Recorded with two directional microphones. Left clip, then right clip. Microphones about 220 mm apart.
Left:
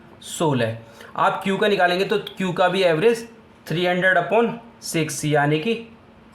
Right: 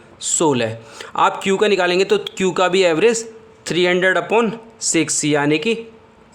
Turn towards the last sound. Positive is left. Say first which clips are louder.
# right 3 dB
turn(degrees=-45)  # may be behind; listen again after turning